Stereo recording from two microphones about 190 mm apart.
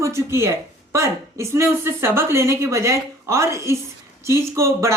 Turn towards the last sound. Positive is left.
turn(degrees=-15)  # may be behind; listen again after turning